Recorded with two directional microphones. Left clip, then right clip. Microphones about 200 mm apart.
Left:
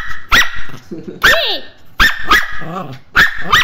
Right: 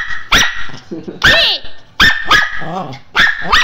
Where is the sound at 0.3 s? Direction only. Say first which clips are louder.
Even; 40° left (ahead or behind).